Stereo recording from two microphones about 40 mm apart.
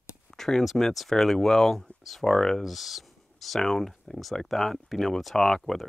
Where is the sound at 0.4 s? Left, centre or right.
Centre.